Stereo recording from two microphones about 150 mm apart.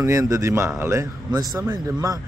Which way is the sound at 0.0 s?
20° right (ahead or behind).